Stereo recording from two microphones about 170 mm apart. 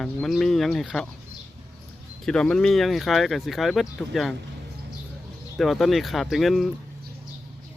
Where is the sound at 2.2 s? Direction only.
5° left (ahead or behind).